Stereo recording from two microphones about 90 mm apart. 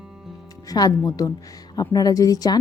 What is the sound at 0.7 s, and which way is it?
Speech, 45° left (ahead or behind).